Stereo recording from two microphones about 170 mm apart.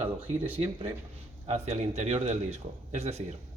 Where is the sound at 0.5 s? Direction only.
35° right (ahead or behind).